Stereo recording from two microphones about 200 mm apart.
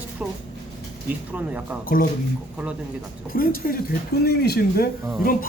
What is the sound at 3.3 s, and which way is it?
Speech, 45° left (ahead or behind).